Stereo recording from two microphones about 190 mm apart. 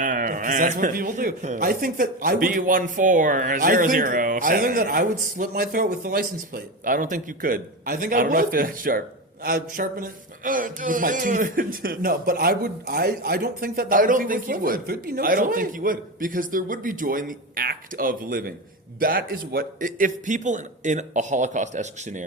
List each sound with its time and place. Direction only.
0.0 s a man's voice: 45° right (ahead or behind)